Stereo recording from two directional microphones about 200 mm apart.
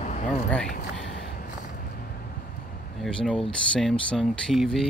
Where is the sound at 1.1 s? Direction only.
60° left (ahead or behind).